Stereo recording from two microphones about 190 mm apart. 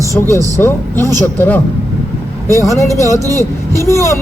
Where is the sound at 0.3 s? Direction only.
15° right (ahead or behind).